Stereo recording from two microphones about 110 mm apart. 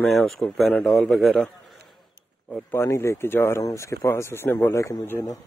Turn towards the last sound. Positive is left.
turn(degrees=25)  # may be behind; listen again after turning